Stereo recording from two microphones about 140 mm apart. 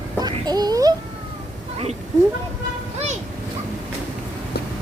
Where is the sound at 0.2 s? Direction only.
30° right (ahead or behind).